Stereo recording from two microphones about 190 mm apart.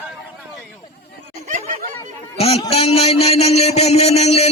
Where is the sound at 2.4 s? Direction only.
30° left (ahead or behind).